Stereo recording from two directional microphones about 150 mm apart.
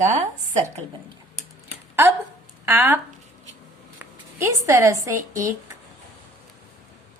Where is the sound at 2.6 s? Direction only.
15° right (ahead or behind).